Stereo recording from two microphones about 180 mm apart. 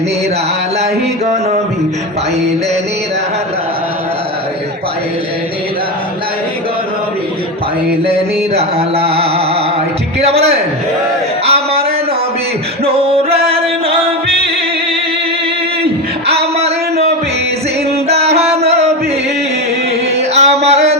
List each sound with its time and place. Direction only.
8.5 s music: 35° right (ahead or behind)
10.2 s a man's voice: 35° right (ahead or behind)
11.4 s a sound: 35° right (ahead or behind)
12.8 s music: 30° right (ahead or behind)
16.2 s a sound: 35° right (ahead or behind)
18.1 s music: 35° right (ahead or behind)
20.1 s music: 35° right (ahead or behind)